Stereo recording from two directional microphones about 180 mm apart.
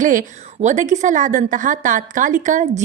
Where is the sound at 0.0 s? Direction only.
45° right (ahead or behind).